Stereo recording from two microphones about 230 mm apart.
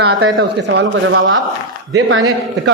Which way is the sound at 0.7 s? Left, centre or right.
Right.